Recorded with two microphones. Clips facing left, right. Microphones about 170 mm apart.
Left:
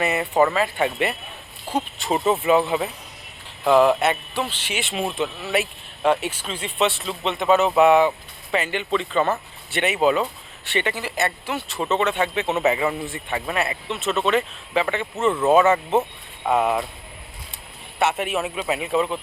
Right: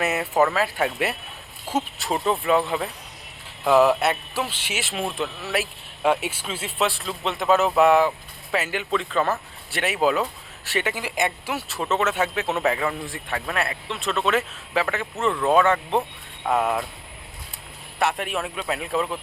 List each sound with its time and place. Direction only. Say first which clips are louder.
0.0 s speech: left 2 dB; centre (ahead or behind)
18.0 s speech: left 2 dB; centre (ahead or behind)